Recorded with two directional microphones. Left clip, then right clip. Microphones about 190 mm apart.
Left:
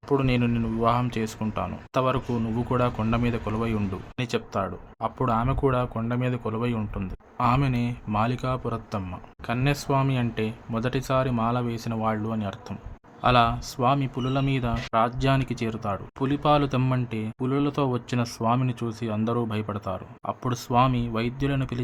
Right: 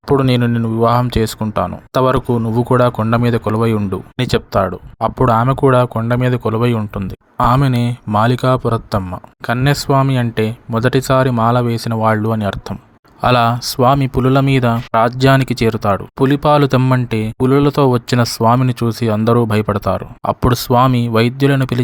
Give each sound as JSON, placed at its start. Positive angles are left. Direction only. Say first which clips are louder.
{"t": 0.1, "sound": "speech", "louder": "right 10 dB", "side_deg": -35}
{"t": 6.7, "sound": "speech", "louder": "right 11 dB", "side_deg": -25}
{"t": 7.3, "sound": "speech", "louder": "right 10 dB", "side_deg": -40}
{"t": 16.8, "sound": "speech", "louder": "right 12 dB", "side_deg": -25}
{"t": 17.1, "sound": "speech", "louder": "right 14 dB", "side_deg": -40}